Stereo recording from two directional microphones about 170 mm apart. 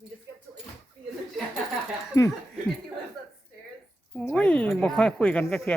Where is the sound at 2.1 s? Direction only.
20° left (ahead or behind).